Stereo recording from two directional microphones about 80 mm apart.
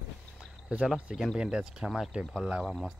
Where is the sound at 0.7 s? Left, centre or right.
Centre.